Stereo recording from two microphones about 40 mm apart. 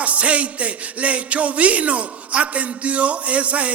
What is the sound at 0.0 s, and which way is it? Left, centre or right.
Music, right.